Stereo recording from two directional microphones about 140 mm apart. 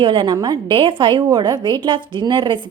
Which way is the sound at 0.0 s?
35° right (ahead or behind).